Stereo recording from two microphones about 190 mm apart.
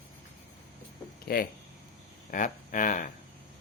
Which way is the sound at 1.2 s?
55° left (ahead or behind).